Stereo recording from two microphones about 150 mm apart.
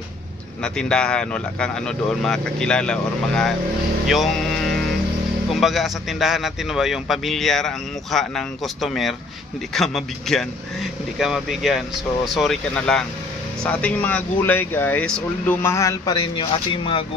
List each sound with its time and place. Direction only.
0.7 s a man's voice: 5° left (ahead or behind)
15.6 s speech: 20° left (ahead or behind); by 17.0 s 35° left (ahead or behind)